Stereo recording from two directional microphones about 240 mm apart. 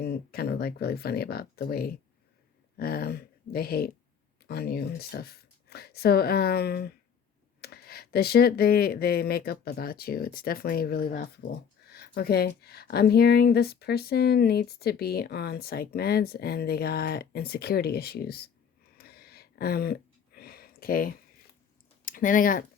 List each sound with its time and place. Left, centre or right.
0.0 s speech: left
18.9 s a sound: left
22.0 s speech: left